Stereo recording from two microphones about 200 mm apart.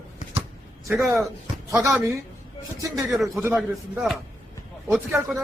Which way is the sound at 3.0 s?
Centre (ahead or behind).